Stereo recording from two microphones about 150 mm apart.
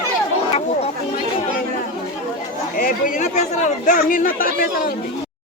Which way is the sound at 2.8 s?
65° left (ahead or behind).